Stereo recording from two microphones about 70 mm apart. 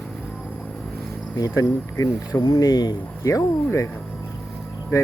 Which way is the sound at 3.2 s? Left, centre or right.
Left.